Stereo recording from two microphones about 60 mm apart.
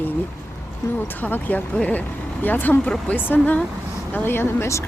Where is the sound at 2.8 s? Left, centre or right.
Left.